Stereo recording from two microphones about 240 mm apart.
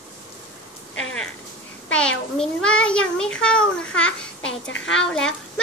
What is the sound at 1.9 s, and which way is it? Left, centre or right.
A child's voice, centre.